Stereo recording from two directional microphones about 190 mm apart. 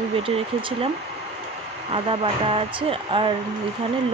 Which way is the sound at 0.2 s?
30° right (ahead or behind).